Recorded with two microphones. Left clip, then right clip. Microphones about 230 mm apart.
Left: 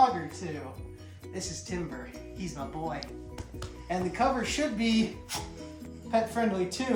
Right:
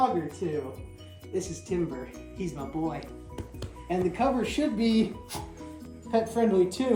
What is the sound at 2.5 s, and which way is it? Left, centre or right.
Speech, left.